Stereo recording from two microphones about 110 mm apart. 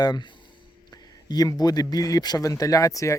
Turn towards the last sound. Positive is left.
turn(degrees=30)  # may be behind; listen again after turning